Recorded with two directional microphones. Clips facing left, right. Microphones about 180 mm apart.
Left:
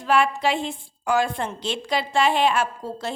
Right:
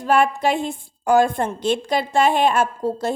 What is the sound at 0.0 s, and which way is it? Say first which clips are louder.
A woman's voice: right 3 dB; 50° right (ahead or behind).